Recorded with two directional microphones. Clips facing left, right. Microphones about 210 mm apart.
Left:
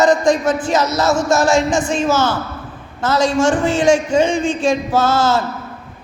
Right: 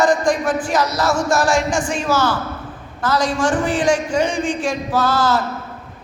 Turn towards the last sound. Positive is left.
turn(degrees=25)  # may be behind; listen again after turning